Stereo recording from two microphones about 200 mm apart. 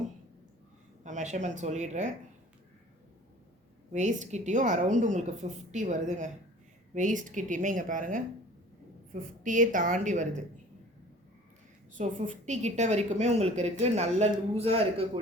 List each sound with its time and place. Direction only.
1.0 s a woman's voice: 35° right (ahead or behind)
3.9 s a woman's voice: 35° right (ahead or behind)
9.4 s a woman's voice: 40° right (ahead or behind)
11.9 s a woman's voice: 35° right (ahead or behind)